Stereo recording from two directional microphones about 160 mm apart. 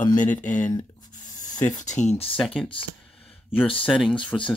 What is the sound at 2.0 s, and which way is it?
Speech, 40° left (ahead or behind).